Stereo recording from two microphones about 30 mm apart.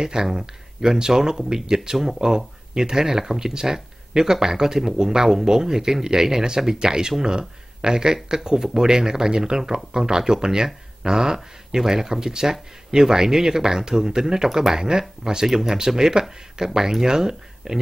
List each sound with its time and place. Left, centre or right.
0.0 s speech: centre